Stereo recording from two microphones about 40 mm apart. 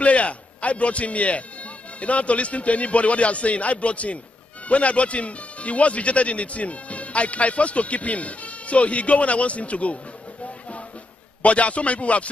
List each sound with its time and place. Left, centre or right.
0.0 s speech: left
11.4 s speech: left